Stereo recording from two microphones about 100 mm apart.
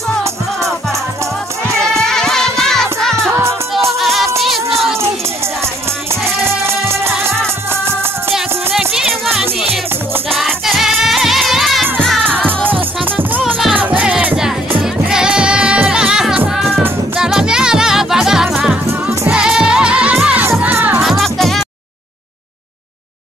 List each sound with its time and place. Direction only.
1.8 s music: 5° left (ahead or behind)
7.7 s music: 25° right (ahead or behind)
8.7 s music: 5° right (ahead or behind)
13.0 s music: 15° right (ahead or behind)
21.0 s music: centre (ahead or behind)